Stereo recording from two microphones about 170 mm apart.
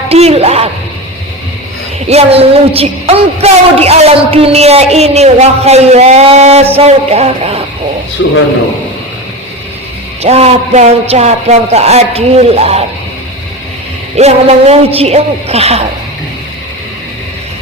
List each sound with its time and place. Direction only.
0.1 s a woman's voice: 35° right (ahead or behind)
2.0 s a woman's voice: 35° right (ahead or behind)
8.2 s a man's voice: 90° left
10.2 s a woman's voice: 40° right (ahead or behind)
14.2 s a woman's voice: 40° right (ahead or behind)